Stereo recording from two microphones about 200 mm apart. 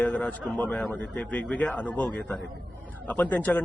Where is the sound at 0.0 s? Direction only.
5° left (ahead or behind).